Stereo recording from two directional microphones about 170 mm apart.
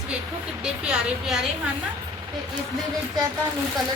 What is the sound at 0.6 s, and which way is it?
Speech, 5° right (ahead or behind).